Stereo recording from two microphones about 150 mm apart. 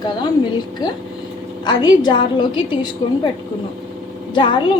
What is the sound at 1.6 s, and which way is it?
A woman's voice, 30° left (ahead or behind).